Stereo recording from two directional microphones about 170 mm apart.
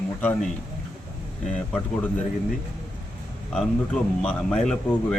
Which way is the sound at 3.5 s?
5° left (ahead or behind).